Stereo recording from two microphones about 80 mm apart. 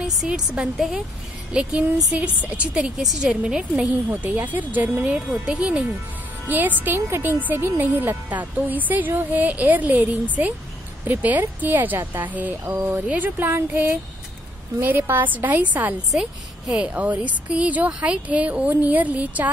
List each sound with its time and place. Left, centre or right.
0.0 s a woman's voice: centre
4.1 s speech: right
16.1 s a woman's voice: centre